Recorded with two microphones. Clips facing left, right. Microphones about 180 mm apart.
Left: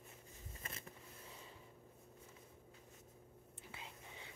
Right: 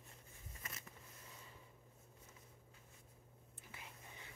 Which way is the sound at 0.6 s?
30° left (ahead or behind).